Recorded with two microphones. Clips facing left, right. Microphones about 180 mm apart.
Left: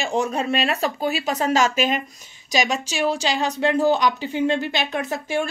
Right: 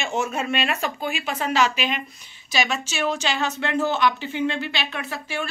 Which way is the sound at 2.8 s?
10° left (ahead or behind).